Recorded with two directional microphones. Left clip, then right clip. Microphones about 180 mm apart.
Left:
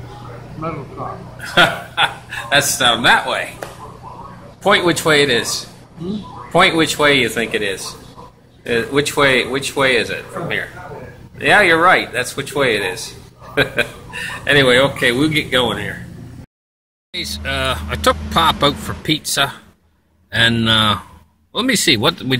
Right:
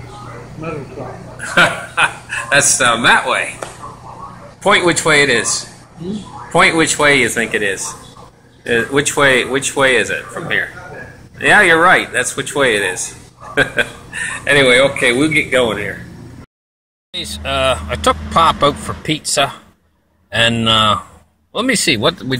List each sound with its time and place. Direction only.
1.4 s a man's voice: 10° left (ahead or behind)
4.6 s a man's voice: 15° left (ahead or behind)
14.1 s speech: 20° left (ahead or behind)
17.5 s a man's voice: 5° left (ahead or behind)